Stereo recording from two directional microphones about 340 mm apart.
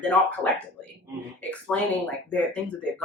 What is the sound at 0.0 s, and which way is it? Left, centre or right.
Speech, centre.